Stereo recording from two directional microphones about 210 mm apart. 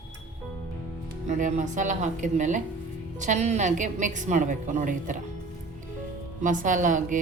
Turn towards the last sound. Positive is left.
turn(degrees=-35)  # may be behind; listen again after turning